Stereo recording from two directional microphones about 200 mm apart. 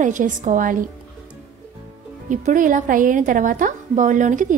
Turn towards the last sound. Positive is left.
turn(degrees=-40)  # may be behind; listen again after turning